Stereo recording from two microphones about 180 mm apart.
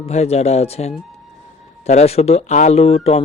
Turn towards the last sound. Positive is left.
turn(degrees=35)  # may be behind; listen again after turning